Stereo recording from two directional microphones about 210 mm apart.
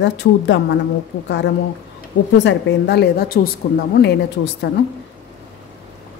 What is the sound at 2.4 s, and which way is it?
A woman's voice, 55° left (ahead or behind).